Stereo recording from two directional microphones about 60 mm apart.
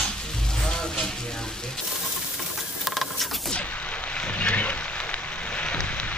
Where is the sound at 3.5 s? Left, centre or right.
Left.